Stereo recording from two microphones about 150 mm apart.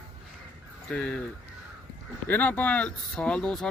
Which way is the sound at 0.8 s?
10° left (ahead or behind).